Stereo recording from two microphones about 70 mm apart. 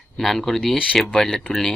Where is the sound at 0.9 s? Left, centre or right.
Centre.